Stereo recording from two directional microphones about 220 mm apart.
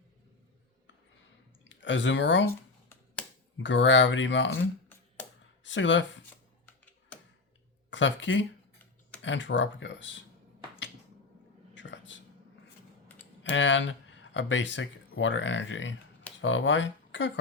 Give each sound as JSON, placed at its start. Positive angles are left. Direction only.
{"t": 1.7, "sound": "speech", "side_deg": 55}
{"t": 3.6, "sound": "speech", "side_deg": 55}
{"t": 7.9, "sound": "speech", "side_deg": 55}
{"t": 11.7, "sound": "a sound", "side_deg": 55}
{"t": 13.4, "sound": "speech", "side_deg": 55}